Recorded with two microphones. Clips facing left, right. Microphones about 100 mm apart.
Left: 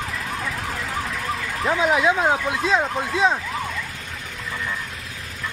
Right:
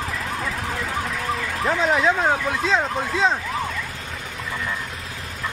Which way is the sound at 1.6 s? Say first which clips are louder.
Left 1 dB; 5° left (ahead or behind).